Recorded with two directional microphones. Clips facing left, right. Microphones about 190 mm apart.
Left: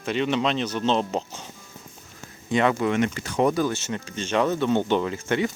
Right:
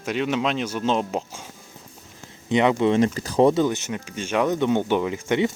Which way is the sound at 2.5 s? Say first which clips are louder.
Right 3 dB; 20° right (ahead or behind).